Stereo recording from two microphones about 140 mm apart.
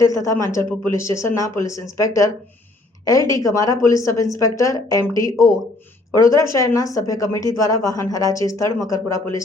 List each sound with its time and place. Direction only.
0.0 s speech: 25° left (ahead or behind)
6.1 s speech: 20° left (ahead or behind)